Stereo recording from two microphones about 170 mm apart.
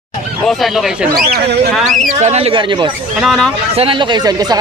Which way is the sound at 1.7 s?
Centre (ahead or behind).